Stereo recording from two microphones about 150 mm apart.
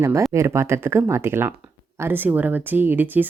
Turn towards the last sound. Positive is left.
turn(degrees=-10)  # may be behind; listen again after turning